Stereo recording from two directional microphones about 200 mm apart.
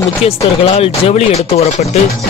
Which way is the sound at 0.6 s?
30° left (ahead or behind).